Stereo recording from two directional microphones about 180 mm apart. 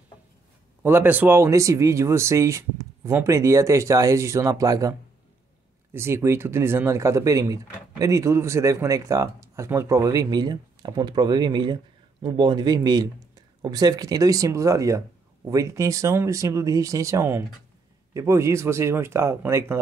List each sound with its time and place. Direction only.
0.8 s speech: 10° right (ahead or behind)
5.9 s speech: 15° right (ahead or behind)